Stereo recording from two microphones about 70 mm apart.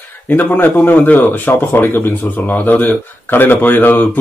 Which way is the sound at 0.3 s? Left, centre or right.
Left.